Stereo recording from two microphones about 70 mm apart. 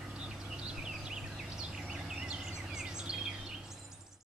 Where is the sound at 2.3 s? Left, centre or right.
Centre.